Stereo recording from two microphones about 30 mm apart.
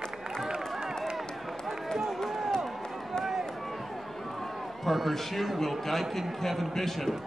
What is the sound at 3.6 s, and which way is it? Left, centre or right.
Run, centre.